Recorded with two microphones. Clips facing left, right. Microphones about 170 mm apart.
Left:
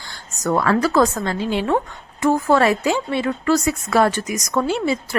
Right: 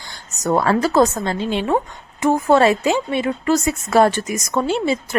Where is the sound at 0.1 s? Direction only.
25° right (ahead or behind).